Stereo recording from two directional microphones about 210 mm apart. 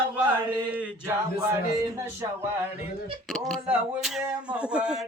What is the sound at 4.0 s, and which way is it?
Speech, centre (ahead or behind).